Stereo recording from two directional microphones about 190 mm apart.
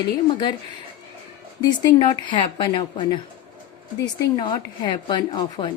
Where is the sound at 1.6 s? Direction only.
20° left (ahead or behind).